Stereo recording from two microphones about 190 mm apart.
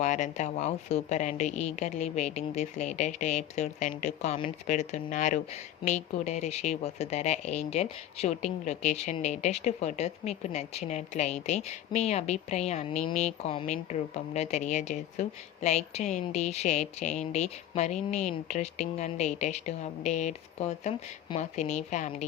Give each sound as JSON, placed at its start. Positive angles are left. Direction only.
{"t": 0.0, "sound": "speech", "side_deg": 40}